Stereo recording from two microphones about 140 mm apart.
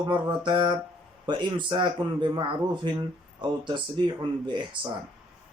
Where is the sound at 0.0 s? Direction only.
30° right (ahead or behind).